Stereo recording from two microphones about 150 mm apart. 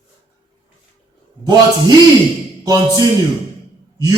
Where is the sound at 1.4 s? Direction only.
25° right (ahead or behind).